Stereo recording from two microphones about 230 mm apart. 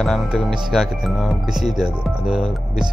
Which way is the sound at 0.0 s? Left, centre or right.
Centre.